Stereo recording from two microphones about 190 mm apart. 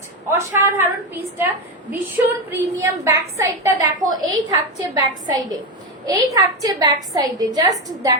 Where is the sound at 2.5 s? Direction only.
15° right (ahead or behind).